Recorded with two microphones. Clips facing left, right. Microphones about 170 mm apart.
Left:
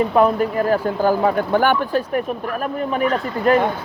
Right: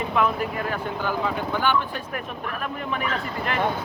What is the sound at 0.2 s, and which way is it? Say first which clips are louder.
Speech: left 7 dB; 35° left (ahead or behind).